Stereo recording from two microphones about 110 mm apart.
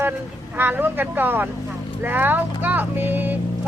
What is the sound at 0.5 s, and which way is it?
Speech, 20° right (ahead or behind).